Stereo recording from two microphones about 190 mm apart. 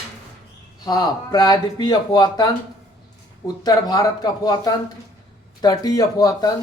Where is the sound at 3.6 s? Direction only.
20° left (ahead or behind).